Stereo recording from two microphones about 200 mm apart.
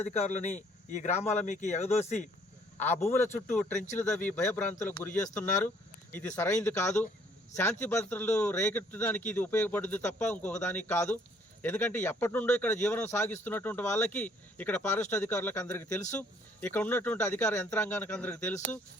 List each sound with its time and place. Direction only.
0.0 s a man's voice: 35° left (ahead or behind)
3.0 s speech: 10° left (ahead or behind)
4.6 s speech: 40° left (ahead or behind)
5.6 s speech: 10° left (ahead or behind)